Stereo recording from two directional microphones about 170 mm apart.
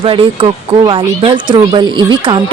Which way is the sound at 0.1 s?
30° right (ahead or behind).